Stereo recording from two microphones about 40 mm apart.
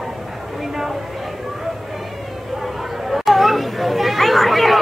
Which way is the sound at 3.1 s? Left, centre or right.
Centre.